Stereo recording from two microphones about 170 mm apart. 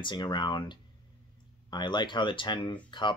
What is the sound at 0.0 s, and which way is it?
Speech, 25° left (ahead or behind).